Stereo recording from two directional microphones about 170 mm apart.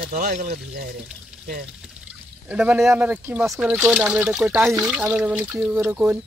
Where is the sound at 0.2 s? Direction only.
60° right (ahead or behind).